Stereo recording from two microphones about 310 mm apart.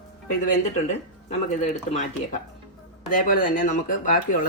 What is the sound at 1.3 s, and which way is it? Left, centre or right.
Speech, left.